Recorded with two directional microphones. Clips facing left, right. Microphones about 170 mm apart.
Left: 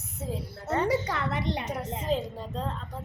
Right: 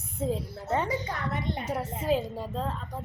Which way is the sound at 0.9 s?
85° left.